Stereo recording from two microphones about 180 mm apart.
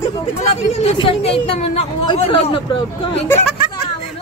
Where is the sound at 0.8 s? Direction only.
30° left (ahead or behind).